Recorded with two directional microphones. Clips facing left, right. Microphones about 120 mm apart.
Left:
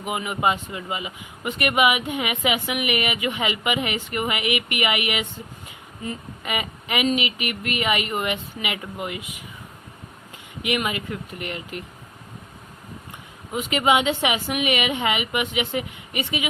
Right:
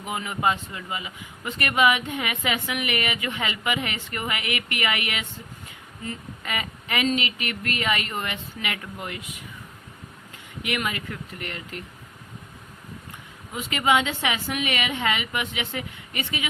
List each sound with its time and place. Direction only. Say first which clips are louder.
0.0 s speech: left 2 dB; 15° left (ahead or behind)
10.6 s speech: left 3 dB; 20° left (ahead or behind)
13.5 s speech: left 2 dB; 20° left (ahead or behind)